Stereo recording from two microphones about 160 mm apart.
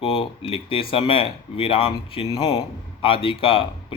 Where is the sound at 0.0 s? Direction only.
35° left (ahead or behind).